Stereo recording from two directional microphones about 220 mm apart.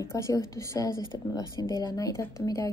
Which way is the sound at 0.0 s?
15° left (ahead or behind).